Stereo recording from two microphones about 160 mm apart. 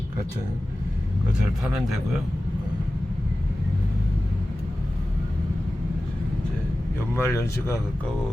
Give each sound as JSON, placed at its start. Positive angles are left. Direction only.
{"t": 1.6, "sound": "speech", "side_deg": -5}
{"t": 7.2, "sound": "speech", "side_deg": 15}